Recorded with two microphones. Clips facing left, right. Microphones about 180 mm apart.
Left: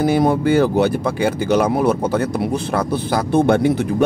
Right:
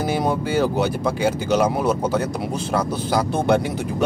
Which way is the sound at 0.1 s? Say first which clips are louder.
Left 6 dB; 55° left (ahead or behind).